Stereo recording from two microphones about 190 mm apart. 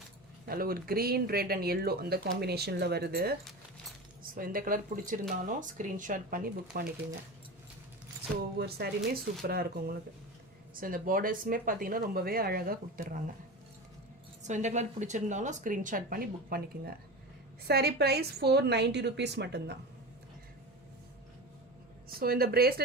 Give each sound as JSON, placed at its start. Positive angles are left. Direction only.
{"t": 0.4, "sound": "speech", "side_deg": -50}
{"t": 4.4, "sound": "speech", "side_deg": -45}
{"t": 8.5, "sound": "a woman's voice", "side_deg": -60}
{"t": 14.4, "sound": "a woman's voice", "side_deg": -40}
{"t": 22.2, "sound": "speech", "side_deg": -55}